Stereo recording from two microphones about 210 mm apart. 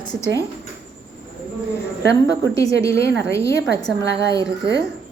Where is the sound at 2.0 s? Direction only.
60° right (ahead or behind).